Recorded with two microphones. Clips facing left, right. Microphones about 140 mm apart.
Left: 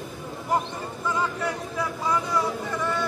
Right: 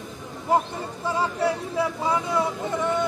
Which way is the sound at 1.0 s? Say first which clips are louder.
Right 3 dB; 30° right (ahead or behind).